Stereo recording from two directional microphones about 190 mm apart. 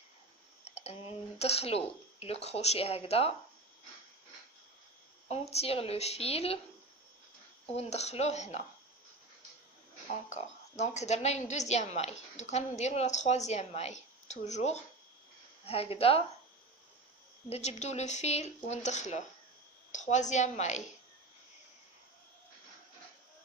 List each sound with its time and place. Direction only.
0.6 s a woman's voice: 30° left (ahead or behind)
5.3 s a woman's voice: 35° left (ahead or behind)
7.7 s a woman's voice: 35° left (ahead or behind)
10.1 s a woman's voice: 35° left (ahead or behind)
17.5 s a woman's voice: 35° left (ahead or behind)